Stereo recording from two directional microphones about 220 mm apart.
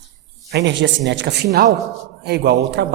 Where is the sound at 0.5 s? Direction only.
55° right (ahead or behind).